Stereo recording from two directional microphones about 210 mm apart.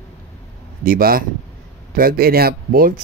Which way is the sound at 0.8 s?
45° right (ahead or behind).